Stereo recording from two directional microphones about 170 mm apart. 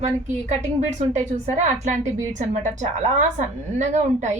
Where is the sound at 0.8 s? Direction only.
40° right (ahead or behind).